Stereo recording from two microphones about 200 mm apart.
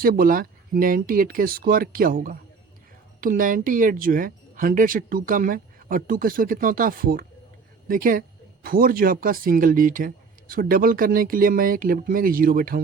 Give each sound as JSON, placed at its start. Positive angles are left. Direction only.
{"t": 0.0, "sound": "speech", "side_deg": -45}